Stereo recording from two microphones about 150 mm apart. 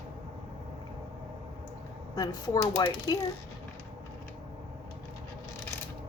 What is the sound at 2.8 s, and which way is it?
Speech, 25° left (ahead or behind).